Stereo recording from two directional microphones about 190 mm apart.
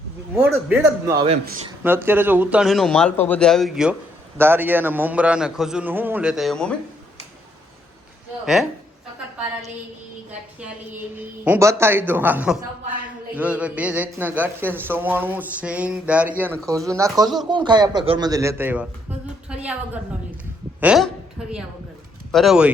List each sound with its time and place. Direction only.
0.3 s a man's voice: 5° right (ahead or behind)
1.0 s speech: 25° right (ahead or behind)
1.8 s a man's voice: 10° right (ahead or behind)
11.2 s a man's voice: 10° right (ahead or behind)
16.6 s a man's voice: 15° right (ahead or behind)
20.8 s a man's voice: 5° right (ahead or behind)
22.3 s speech: centre (ahead or behind)